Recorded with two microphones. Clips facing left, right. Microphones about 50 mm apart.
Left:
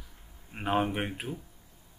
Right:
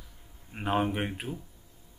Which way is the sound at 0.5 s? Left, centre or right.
Centre.